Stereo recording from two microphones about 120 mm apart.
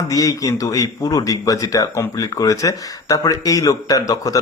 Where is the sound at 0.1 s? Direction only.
30° left (ahead or behind).